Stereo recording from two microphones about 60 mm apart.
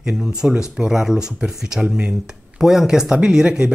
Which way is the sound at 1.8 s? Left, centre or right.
Right.